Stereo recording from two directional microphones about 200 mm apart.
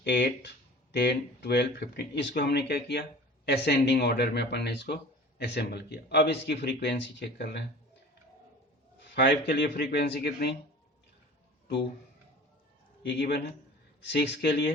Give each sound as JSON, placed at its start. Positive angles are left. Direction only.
{"t": 0.0, "sound": "speech", "side_deg": 60}
{"t": 9.0, "sound": "a man's voice", "side_deg": 50}
{"t": 13.0, "sound": "a man's voice", "side_deg": 55}